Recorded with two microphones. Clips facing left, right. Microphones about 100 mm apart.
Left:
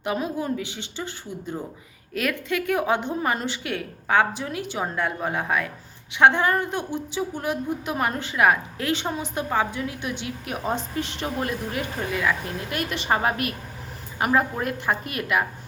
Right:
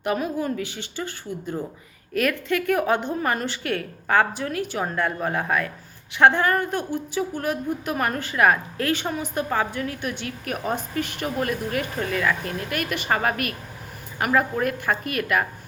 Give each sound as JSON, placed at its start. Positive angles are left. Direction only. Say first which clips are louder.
{"t": 0.0, "sound": "a woman's voice", "louder": "right 2 dB", "side_deg": 20}